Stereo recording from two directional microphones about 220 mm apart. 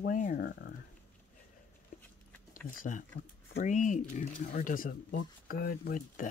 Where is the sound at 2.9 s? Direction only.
35° left (ahead or behind).